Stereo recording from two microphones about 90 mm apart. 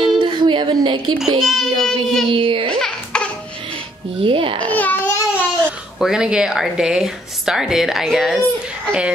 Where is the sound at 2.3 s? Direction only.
75° right (ahead or behind).